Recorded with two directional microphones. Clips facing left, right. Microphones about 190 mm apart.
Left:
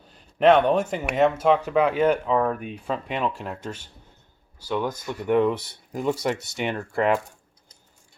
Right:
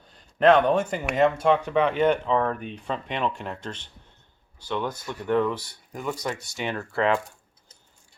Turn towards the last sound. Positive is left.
turn(degrees=15)  # may be behind; listen again after turning